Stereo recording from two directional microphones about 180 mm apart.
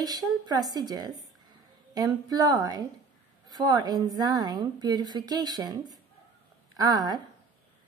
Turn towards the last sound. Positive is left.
turn(degrees=-20)  # may be behind; listen again after turning